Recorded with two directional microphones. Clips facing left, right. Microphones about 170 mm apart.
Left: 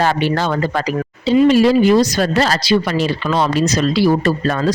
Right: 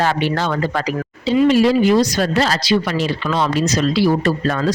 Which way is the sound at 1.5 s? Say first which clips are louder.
Left 1 dB; 40° left (ahead or behind).